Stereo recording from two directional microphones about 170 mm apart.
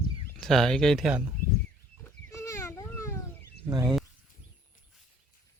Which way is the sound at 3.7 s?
25° right (ahead or behind).